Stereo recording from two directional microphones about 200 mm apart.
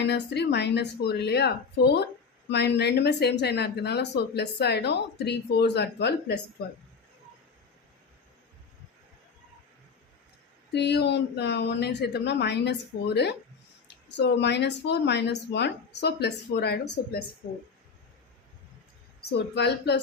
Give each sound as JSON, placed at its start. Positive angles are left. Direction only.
{"t": 0.0, "sound": "speech", "side_deg": 55}
{"t": 10.7, "sound": "speech", "side_deg": 60}
{"t": 19.2, "sound": "speech", "side_deg": 55}